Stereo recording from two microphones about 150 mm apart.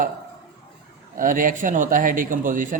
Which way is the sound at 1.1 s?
65° right (ahead or behind).